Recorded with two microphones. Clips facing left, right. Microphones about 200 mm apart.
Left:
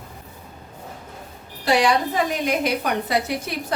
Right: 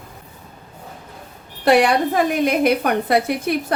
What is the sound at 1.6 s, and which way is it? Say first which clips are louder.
A woman's voice: right 4 dB; 55° right (ahead or behind).